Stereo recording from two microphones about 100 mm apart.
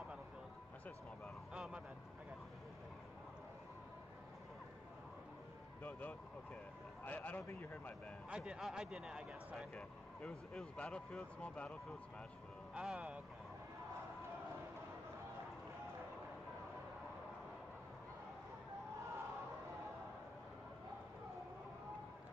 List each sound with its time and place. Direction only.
1.5 s a sound: 10° right (ahead or behind)
5.8 s speech: 15° left (ahead or behind)
8.3 s speech: 5° right (ahead or behind)
9.8 s speech: 5° left (ahead or behind)
12.7 s speech: 10° right (ahead or behind)